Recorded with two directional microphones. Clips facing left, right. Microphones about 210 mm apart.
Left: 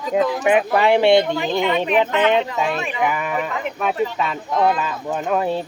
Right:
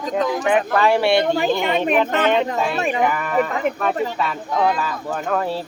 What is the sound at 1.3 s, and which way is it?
Speech, 50° right (ahead or behind).